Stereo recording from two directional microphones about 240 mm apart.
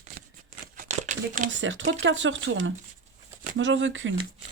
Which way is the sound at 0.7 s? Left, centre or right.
Right.